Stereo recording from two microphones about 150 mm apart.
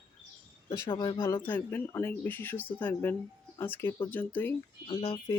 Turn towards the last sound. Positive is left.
turn(degrees=35)  # may be behind; listen again after turning